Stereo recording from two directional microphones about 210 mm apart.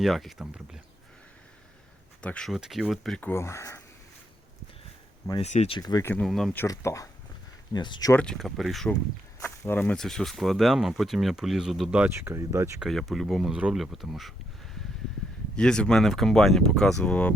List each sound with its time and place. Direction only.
0.0 s speech: centre (ahead or behind)
2.2 s speech: 5° left (ahead or behind)
5.3 s speech: 30° left (ahead or behind); by 6.2 s 10° left (ahead or behind)
6.2 s speech: centre (ahead or behind); by 8.1 s 20° left (ahead or behind)
8.1 s speech: 5° left (ahead or behind); by 12.7 s 15° right (ahead or behind)
12.8 s speech: centre (ahead or behind)
15.5 s speech: 5° left (ahead or behind)